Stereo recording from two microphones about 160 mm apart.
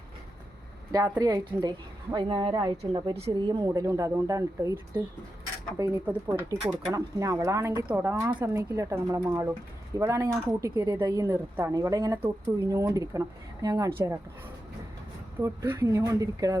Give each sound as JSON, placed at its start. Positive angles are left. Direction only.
{"t": 0.9, "sound": "a woman's voice", "side_deg": -20}
{"t": 3.6, "sound": "a woman's voice", "side_deg": -20}
{"t": 15.4, "sound": "a woman's voice", "side_deg": -15}